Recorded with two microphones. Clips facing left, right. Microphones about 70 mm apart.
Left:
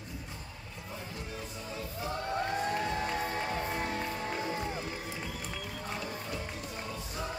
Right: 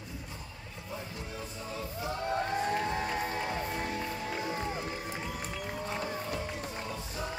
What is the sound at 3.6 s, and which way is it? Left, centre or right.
Music, left.